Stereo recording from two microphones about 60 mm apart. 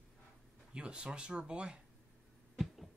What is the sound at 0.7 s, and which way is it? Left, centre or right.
Speech, centre.